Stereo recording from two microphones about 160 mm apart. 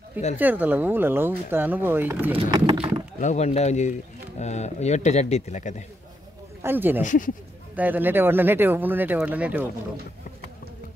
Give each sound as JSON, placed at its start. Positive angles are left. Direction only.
{"t": 0.4, "sound": "speech", "side_deg": -10}
{"t": 2.3, "sound": "speech", "side_deg": -25}
{"t": 3.2, "sound": "speech", "side_deg": 45}
{"t": 6.6, "sound": "speech", "side_deg": -15}
{"t": 7.0, "sound": "speech", "side_deg": 55}
{"t": 7.7, "sound": "speech", "side_deg": -10}